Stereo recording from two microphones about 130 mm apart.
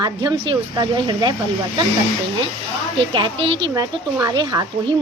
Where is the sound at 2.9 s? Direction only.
40° right (ahead or behind).